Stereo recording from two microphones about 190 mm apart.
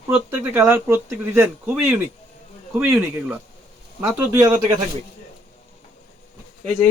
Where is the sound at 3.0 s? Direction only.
10° right (ahead or behind).